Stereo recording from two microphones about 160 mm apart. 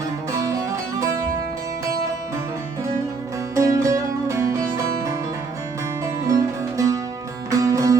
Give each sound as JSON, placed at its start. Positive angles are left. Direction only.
{"t": 0.3, "sound": "music", "side_deg": -20}
{"t": 3.5, "sound": "music", "side_deg": -20}
{"t": 6.2, "sound": "music", "side_deg": -20}